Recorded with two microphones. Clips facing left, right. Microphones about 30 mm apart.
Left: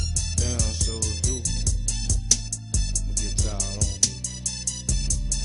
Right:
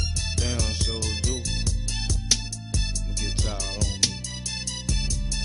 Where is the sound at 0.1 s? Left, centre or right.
Right.